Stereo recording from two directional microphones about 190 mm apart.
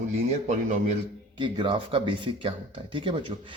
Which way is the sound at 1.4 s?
25° right (ahead or behind).